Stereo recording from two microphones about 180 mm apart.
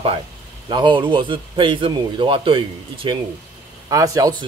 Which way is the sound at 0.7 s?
25° right (ahead or behind).